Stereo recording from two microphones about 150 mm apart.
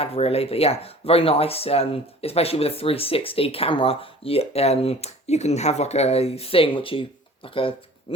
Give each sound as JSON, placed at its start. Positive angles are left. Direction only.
{"t": 0.0, "sound": "speech", "side_deg": 40}